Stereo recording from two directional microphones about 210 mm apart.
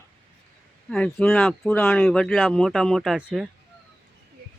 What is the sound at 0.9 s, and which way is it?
Speech, 5° left (ahead or behind).